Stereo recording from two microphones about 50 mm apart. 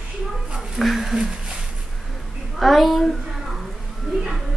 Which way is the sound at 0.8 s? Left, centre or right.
Centre.